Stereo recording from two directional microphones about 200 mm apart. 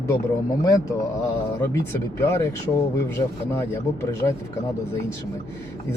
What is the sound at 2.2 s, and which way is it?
Speech, 15° left (ahead or behind).